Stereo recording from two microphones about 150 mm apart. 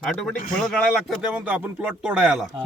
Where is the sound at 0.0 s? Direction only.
Centre (ahead or behind).